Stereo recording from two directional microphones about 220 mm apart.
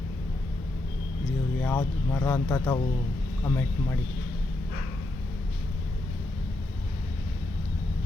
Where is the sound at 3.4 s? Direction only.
10° left (ahead or behind).